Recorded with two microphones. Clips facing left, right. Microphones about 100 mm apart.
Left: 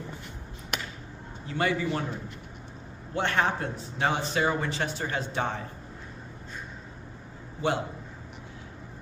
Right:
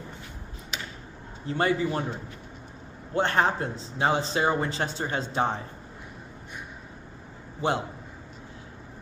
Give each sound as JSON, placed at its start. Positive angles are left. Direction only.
{"t": 0.7, "sound": "a sound", "side_deg": 55}
{"t": 1.5, "sound": "a man's voice", "side_deg": -35}
{"t": 3.2, "sound": "a man's voice", "side_deg": -35}